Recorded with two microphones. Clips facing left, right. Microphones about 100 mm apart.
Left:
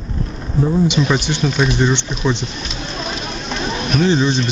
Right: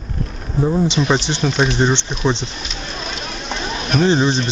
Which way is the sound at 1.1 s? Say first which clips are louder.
Even; 30° right (ahead or behind).